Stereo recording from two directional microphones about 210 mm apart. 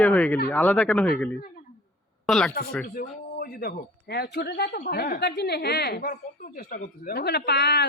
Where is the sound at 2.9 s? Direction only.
45° left (ahead or behind).